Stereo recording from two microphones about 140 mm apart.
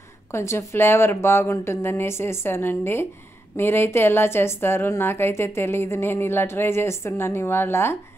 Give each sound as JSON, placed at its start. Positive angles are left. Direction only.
{"t": 0.3, "sound": "a woman's voice", "side_deg": 20}